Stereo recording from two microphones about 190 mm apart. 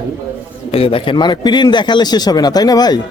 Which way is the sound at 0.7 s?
30° left (ahead or behind).